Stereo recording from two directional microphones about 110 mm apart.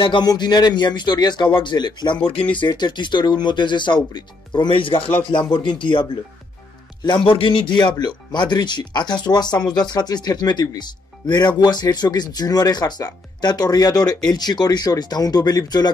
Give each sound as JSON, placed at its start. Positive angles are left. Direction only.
{"t": 0.0, "sound": "speech", "side_deg": 45}
{"t": 7.2, "sound": "speech", "side_deg": 50}